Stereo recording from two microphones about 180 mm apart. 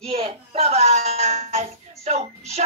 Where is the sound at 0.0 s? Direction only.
35° right (ahead or behind).